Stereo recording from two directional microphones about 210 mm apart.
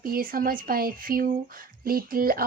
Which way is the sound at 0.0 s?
45° right (ahead or behind).